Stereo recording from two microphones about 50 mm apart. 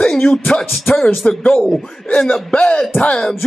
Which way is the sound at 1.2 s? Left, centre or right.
Centre.